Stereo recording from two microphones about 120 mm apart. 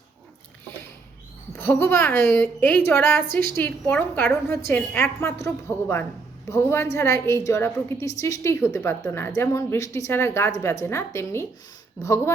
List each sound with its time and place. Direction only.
1.5 s a woman's voice: 20° left (ahead or behind)